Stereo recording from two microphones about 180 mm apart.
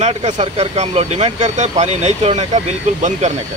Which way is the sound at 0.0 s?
40° right (ahead or behind).